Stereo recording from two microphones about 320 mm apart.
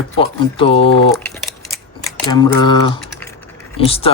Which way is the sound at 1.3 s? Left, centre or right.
Centre.